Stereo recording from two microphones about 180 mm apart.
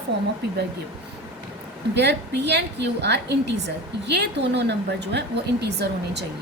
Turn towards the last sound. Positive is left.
turn(degrees=-65)  # may be behind; listen again after turning